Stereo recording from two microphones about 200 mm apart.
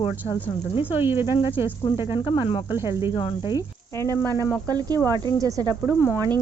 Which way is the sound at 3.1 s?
25° left (ahead or behind).